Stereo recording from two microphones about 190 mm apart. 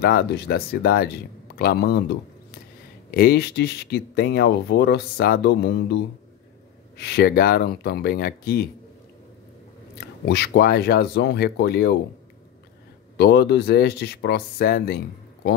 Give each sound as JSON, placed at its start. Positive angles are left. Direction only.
{"t": 0.0, "sound": "speech", "side_deg": 60}
{"t": 9.9, "sound": "speech", "side_deg": 60}
{"t": 13.2, "sound": "speech", "side_deg": 60}